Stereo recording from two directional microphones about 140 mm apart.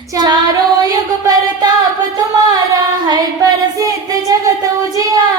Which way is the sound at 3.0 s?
25° right (ahead or behind).